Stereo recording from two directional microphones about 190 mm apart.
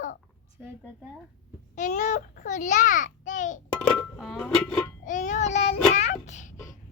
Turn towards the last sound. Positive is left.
turn(degrees=40)  # may be behind; listen again after turning